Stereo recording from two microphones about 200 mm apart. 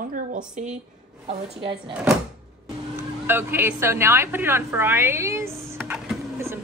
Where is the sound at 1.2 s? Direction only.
30° right (ahead or behind).